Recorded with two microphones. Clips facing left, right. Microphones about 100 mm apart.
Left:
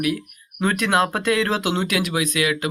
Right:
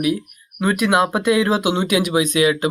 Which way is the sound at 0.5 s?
5° right (ahead or behind).